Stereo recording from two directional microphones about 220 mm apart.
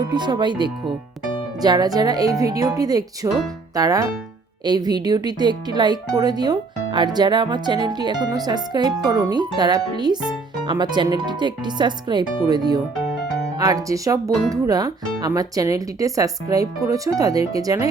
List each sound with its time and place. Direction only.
0.1 s speech: 20° right (ahead or behind)